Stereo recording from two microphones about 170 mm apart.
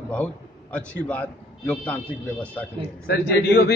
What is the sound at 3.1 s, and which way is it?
Speech, 80° left.